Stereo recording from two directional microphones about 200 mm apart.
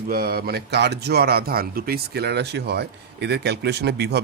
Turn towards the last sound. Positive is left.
turn(degrees=-55)  # may be behind; listen again after turning